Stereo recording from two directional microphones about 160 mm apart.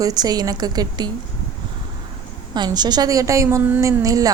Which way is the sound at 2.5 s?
25° right (ahead or behind).